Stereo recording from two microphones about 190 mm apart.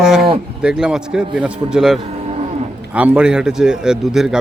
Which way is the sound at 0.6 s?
5° right (ahead or behind).